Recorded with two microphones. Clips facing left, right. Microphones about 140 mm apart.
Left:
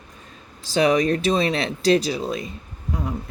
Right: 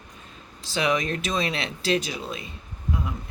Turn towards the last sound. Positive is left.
turn(degrees=35)  # may be behind; listen again after turning